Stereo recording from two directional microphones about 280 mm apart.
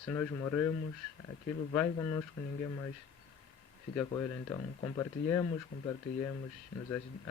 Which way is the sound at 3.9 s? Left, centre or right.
Centre.